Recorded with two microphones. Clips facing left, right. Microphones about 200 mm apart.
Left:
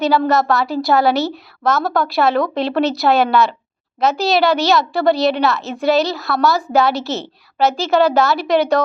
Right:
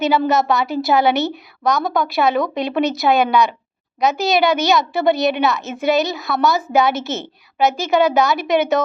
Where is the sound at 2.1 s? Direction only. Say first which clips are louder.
Left 2 dB; centre (ahead or behind).